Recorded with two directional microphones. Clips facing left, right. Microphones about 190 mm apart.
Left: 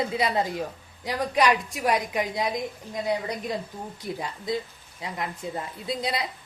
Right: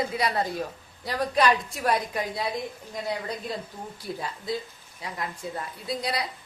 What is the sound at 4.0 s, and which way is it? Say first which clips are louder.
A woman's voice: left 1 dB; 20° left (ahead or behind).